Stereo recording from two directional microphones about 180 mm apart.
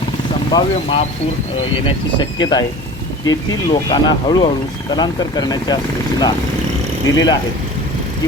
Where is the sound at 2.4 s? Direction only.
20° left (ahead or behind).